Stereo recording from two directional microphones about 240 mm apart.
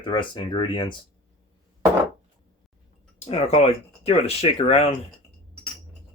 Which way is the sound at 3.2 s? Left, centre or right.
Left.